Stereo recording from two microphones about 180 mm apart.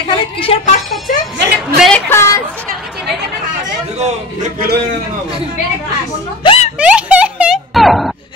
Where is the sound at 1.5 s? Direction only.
Centre (ahead or behind).